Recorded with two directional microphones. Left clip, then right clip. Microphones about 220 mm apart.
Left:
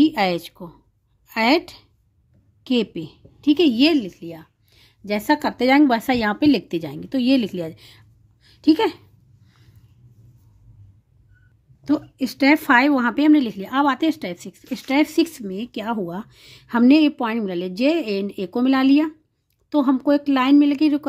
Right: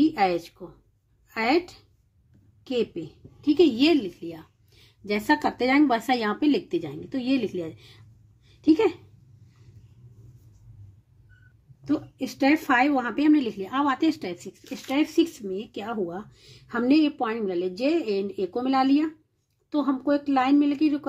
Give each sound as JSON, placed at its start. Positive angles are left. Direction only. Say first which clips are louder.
{"t": 0.0, "sound": "a woman's voice", "louder": "left 4 dB", "side_deg": 50}
{"t": 11.8, "sound": "a woman's voice", "louder": "left 6 dB", "side_deg": 40}
{"t": 14.7, "sound": "speech", "louder": "left 6 dB", "side_deg": 45}